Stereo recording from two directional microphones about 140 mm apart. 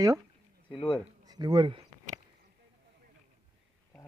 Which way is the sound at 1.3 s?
30° right (ahead or behind).